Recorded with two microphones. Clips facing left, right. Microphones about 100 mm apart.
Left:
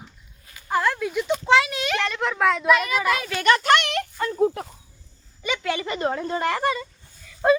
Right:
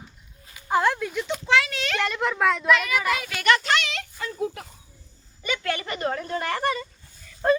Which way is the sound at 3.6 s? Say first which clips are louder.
Left 6 dB; 55° left (ahead or behind).